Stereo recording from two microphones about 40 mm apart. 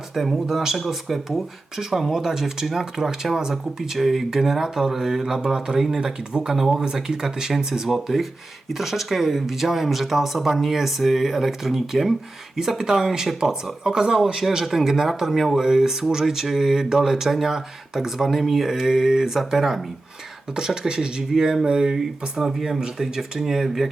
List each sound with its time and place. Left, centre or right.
0.1 s speech: centre
13.8 s speech: centre